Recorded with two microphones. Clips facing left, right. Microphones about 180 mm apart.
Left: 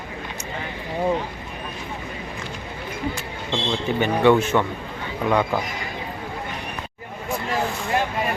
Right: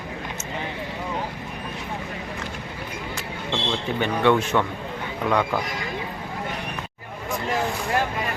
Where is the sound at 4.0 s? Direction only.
5° left (ahead or behind).